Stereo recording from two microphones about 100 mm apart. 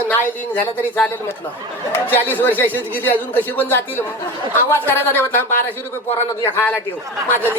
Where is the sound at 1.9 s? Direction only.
20° left (ahead or behind).